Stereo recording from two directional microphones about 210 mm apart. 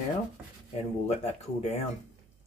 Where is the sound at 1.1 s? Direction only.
30° left (ahead or behind).